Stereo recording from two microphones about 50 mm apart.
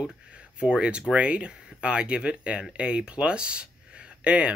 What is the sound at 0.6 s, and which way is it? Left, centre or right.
Speech, right.